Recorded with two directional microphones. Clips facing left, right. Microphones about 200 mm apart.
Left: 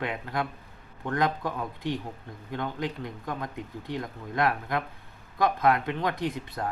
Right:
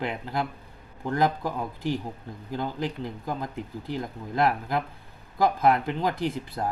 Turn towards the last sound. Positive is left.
turn(degrees=-30)  # may be behind; listen again after turning